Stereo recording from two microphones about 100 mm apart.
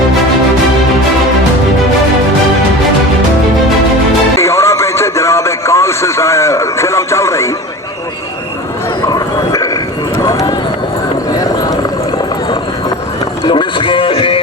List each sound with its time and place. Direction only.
4.4 s radio: 30° left (ahead or behind)
9.0 s dog: 40° left (ahead or behind)
10.2 s run: 35° left (ahead or behind)
11.3 s a sound: 35° left (ahead or behind)
13.4 s music: 50° left (ahead or behind)